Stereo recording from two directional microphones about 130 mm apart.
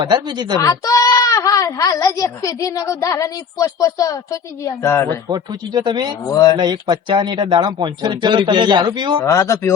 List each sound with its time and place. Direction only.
0.0 s speech: 35° right (ahead or behind)
0.6 s speech: 25° left (ahead or behind)
5.3 s speech: 35° right (ahead or behind)
6.2 s speech: 30° left (ahead or behind)
6.6 s speech: 35° right (ahead or behind)
9.2 s speech: 20° left (ahead or behind)